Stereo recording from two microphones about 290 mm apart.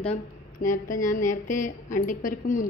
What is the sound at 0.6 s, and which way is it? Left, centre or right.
A woman's voice, left.